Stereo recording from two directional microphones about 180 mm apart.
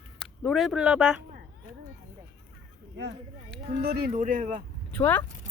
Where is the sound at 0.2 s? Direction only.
Centre (ahead or behind).